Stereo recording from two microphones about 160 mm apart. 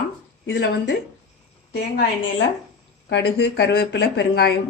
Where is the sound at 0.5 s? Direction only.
90° left.